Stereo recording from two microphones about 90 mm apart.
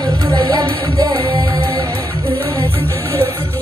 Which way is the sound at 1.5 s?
40° right (ahead or behind).